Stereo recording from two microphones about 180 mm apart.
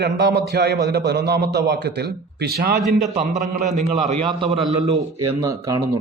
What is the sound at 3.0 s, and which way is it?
Speech, 40° right (ahead or behind).